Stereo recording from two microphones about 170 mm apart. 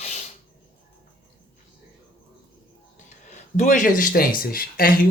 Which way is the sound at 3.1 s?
45° left (ahead or behind).